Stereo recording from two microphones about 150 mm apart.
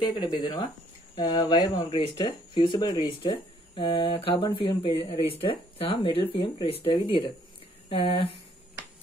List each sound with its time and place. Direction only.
0.4 s speech: 30° left (ahead or behind)